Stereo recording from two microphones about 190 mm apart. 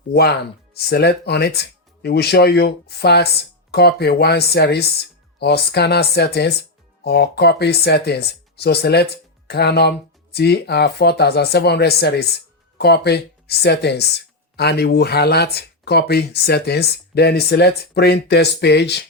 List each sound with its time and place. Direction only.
0.1 s speech: 60° left (ahead or behind)